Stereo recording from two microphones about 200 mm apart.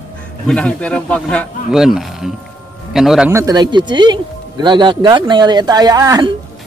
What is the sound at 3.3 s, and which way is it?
Speech, 15° right (ahead or behind).